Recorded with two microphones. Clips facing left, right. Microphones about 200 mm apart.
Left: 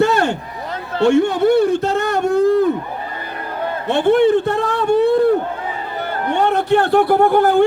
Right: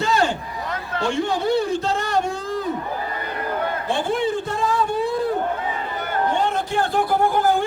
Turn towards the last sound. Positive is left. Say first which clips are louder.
# left 6 dB
turn(degrees=65)  # may be behind; listen again after turning